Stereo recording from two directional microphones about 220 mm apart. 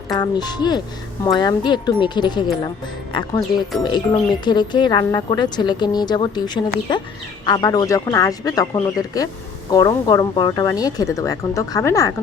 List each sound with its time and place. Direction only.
0.1 s speech: 20° left (ahead or behind)